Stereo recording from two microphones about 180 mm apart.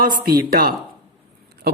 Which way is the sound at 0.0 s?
55° right (ahead or behind).